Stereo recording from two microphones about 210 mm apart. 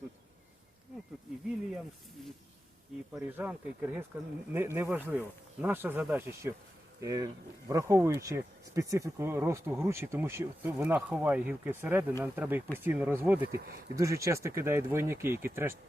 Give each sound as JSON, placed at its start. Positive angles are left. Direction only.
{"t": 3.1, "sound": "speech", "side_deg": -10}
{"t": 13.5, "sound": "speech", "side_deg": -45}
{"t": 13.9, "sound": "speech", "side_deg": -15}